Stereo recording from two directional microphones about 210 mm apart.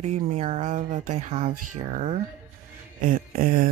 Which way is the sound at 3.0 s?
40° right (ahead or behind).